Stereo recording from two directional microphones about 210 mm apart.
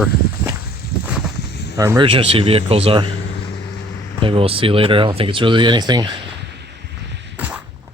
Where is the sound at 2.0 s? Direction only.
25° right (ahead or behind).